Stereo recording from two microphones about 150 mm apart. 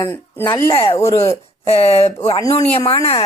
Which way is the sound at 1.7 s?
40° left (ahead or behind).